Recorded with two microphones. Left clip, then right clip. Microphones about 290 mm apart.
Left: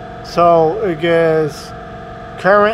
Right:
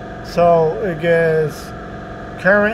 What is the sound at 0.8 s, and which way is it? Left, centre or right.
Speech, centre.